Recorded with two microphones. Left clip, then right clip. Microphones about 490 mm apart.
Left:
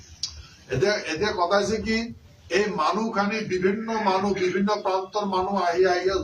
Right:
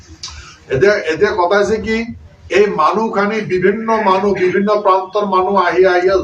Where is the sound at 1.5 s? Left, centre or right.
Left.